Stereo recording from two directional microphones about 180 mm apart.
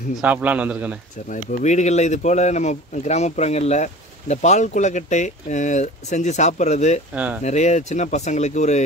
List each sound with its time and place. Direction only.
0.2 s a man's voice: 10° right (ahead or behind)
1.3 s speech: 40° left (ahead or behind)